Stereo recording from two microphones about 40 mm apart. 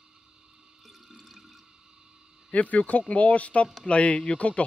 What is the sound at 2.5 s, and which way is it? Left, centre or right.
Speech, left.